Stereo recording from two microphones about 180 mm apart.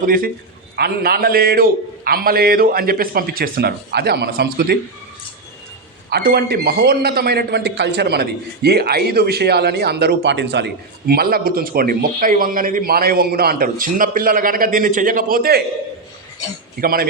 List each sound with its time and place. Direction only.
0.0 s a man's voice: 50° right (ahead or behind)
6.1 s a man's voice: 60° right (ahead or behind)
16.8 s a man's voice: 55° right (ahead or behind)